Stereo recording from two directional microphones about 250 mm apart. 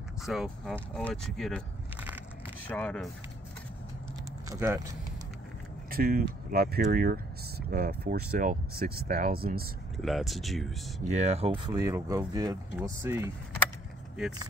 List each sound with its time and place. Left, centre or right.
0.2 s speech: centre
2.6 s speech: centre
4.5 s speech: centre
5.9 s speech: right
10.0 s speech: centre
11.1 s speech: right; by 13.3 s centre